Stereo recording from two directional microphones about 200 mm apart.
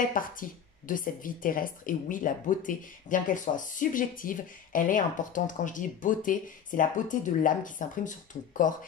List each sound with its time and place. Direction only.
0.1 s a woman's voice: 40° left (ahead or behind)